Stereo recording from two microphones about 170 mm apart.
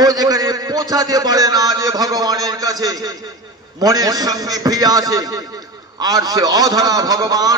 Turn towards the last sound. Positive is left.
turn(degrees=-20)  # may be behind; listen again after turning